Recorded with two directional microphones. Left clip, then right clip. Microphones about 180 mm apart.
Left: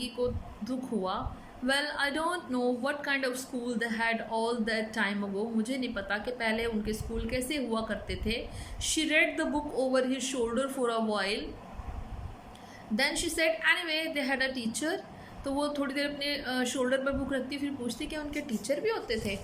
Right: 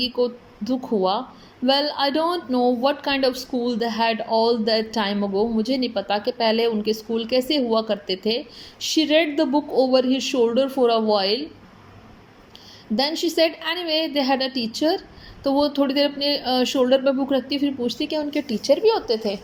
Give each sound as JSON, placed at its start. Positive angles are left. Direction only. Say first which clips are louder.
{"t": 0.0, "sound": "speech", "louder": "right 10 dB", "side_deg": -20}
{"t": 13.0, "sound": "speech", "louder": "right 9 dB", "side_deg": -20}